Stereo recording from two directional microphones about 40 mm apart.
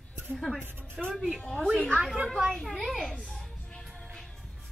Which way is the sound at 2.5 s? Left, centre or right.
Centre.